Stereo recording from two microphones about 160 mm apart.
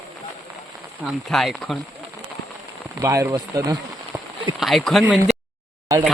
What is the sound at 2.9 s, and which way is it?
Speech, 20° right (ahead or behind).